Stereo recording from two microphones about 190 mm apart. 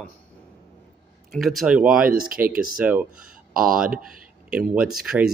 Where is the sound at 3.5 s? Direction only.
50° right (ahead or behind).